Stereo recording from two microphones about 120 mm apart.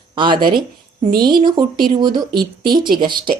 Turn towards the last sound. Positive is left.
turn(degrees=-40)  # may be behind; listen again after turning